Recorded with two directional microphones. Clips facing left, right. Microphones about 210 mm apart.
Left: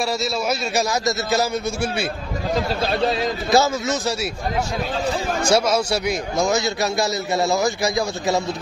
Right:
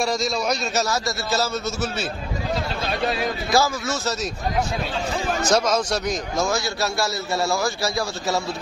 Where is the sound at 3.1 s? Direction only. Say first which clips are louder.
Left 3 dB; 25° left (ahead or behind).